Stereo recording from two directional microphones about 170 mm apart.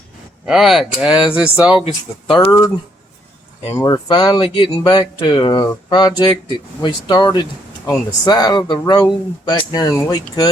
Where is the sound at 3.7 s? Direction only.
20° left (ahead or behind).